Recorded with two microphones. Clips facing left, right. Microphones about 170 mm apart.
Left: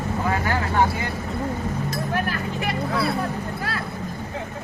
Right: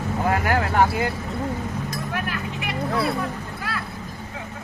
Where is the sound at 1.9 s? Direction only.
35° left (ahead or behind).